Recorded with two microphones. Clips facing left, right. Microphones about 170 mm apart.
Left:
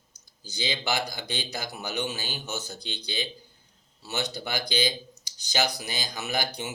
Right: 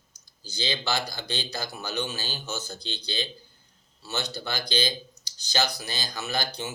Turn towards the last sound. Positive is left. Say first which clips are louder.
# even
turn(degrees=15)  # may be behind; listen again after turning